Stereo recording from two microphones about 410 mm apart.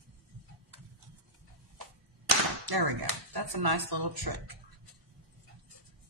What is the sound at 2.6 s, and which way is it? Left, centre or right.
Speech, right.